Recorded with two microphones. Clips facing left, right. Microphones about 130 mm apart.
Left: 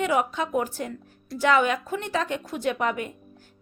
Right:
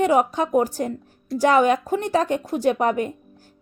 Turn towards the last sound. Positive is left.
turn(degrees=-40)  # may be behind; listen again after turning